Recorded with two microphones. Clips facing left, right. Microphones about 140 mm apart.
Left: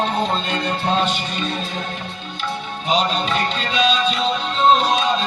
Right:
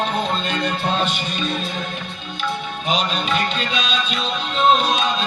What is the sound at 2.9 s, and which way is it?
Music, 30° left (ahead or behind).